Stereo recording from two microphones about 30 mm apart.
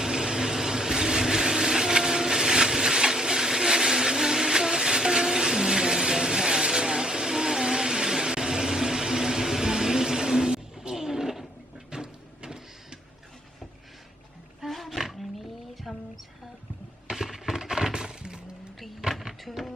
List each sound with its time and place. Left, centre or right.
0.0 s vehicle: right
10.9 s a sound: centre
11.9 s power windows: right
14.7 s roaring cats: centre
17.3 s breaking: centre
19.0 s a sound: right